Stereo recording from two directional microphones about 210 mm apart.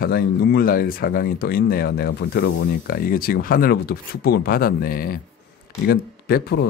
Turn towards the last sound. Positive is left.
turn(degrees=45)  # may be behind; listen again after turning